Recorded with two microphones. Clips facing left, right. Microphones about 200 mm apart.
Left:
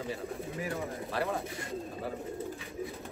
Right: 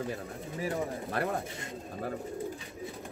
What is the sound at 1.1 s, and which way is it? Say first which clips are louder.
Speech: even; 50° right (ahead or behind).